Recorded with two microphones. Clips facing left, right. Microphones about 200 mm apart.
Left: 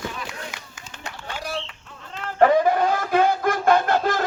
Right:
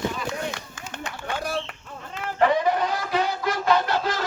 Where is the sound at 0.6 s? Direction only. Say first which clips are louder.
Right 6 dB; 60° right (ahead or behind).